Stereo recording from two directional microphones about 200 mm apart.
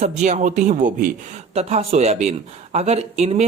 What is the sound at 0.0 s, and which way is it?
Speech, 35° right (ahead or behind).